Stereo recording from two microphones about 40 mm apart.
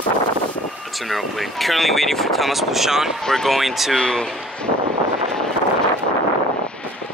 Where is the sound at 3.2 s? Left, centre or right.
Centre.